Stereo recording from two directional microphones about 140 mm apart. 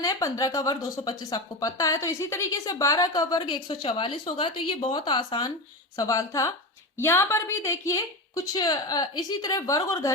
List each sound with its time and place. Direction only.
0.0 s speech: 25° left (ahead or behind)